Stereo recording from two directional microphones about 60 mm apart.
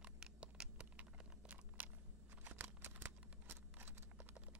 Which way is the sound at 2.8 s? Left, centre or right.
Right.